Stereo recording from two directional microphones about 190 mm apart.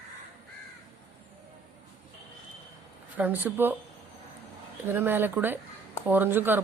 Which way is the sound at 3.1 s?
10° right (ahead or behind).